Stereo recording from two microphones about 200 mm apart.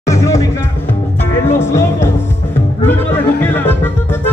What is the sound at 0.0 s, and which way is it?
Music, 15° left (ahead or behind).